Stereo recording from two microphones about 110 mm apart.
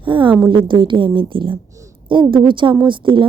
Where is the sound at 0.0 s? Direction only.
50° right (ahead or behind).